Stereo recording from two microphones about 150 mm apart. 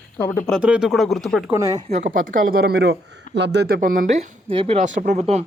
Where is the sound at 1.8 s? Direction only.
55° right (ahead or behind); by 3.0 s 90° right.